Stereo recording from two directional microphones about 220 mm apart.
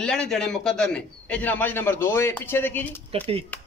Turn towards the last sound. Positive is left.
turn(degrees=-25)  # may be behind; listen again after turning